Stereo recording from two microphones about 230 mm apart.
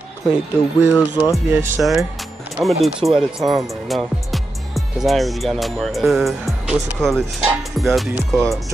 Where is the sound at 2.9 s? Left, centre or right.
Centre.